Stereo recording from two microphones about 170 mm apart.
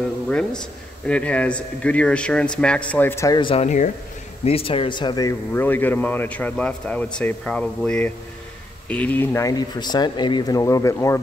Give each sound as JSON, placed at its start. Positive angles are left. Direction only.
{"t": 0.3, "sound": "speech", "side_deg": 5}
{"t": 4.5, "sound": "speech", "side_deg": 35}
{"t": 5.5, "sound": "speech", "side_deg": 10}